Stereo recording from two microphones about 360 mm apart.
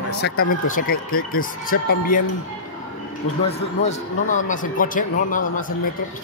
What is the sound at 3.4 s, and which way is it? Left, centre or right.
Speech, centre.